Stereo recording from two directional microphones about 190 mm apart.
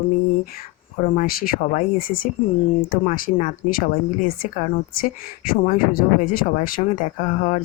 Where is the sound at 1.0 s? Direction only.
40° left (ahead or behind).